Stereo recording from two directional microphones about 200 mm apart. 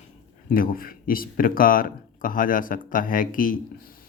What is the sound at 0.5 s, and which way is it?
Speech, 45° left (ahead or behind).